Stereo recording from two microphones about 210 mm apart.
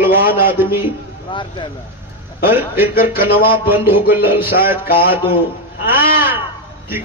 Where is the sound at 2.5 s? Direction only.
10° right (ahead or behind).